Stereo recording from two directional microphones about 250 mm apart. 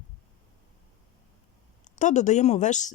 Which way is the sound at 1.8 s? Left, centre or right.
Left.